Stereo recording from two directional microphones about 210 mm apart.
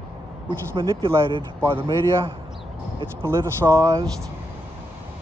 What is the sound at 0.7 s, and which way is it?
Speech, 25° right (ahead or behind).